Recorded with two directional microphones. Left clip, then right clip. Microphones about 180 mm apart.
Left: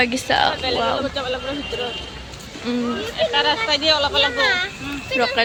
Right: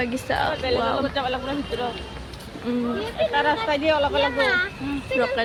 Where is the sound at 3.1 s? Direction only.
55° right (ahead or behind).